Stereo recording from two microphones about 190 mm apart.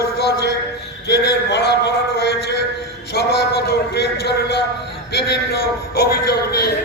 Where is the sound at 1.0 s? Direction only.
60° left (ahead or behind).